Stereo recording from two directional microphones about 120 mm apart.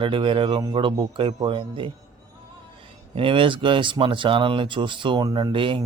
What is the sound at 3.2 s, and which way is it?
Speech, 45° right (ahead or behind).